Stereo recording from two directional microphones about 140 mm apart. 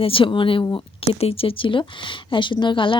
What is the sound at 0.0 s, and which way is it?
Speech, 40° left (ahead or behind).